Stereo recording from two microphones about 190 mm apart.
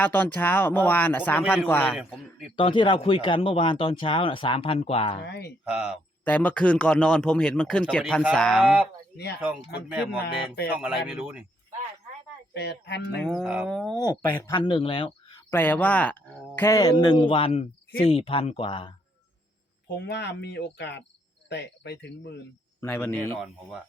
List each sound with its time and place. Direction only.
0.0 s speech: 10° left (ahead or behind)
1.9 s speech: 5° right (ahead or behind)
2.6 s speech: 25° left (ahead or behind)
5.2 s speech: 60° left (ahead or behind)
6.2 s speech: 10° left (ahead or behind)
10.2 s speech: 55° left (ahead or behind)
10.8 s speech: 5° right (ahead or behind)
12.5 s speech: 60° left (ahead or behind)
13.2 s speech: 5° right (ahead or behind)
14.5 s speech: 25° left (ahead or behind)
15.4 s speech: 10° left (ahead or behind); by 18.9 s 30° left (ahead or behind)
19.9 s speech: 60° left (ahead or behind)
22.8 s speech: 10° left (ahead or behind)